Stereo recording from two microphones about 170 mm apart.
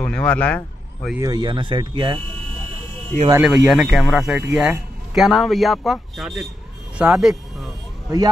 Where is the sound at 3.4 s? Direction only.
Centre (ahead or behind).